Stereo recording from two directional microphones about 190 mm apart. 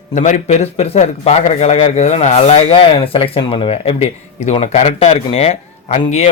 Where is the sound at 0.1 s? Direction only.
40° left (ahead or behind).